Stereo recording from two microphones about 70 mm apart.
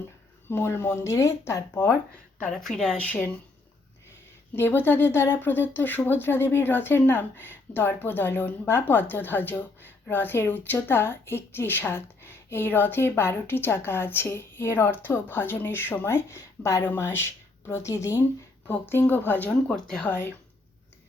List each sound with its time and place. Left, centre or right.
0.4 s speech: left
2.5 s speech: centre
4.5 s speech: left
18.7 s speech: left
19.5 s speech: centre
20.1 s speech: left